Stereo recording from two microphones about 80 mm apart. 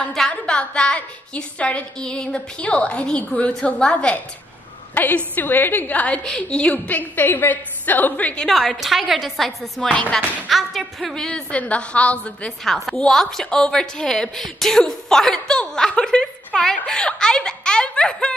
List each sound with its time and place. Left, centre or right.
0.0 s a woman's voice: centre
8.5 s speech: centre
10.5 s speech: centre
11.2 s a woman's voice: centre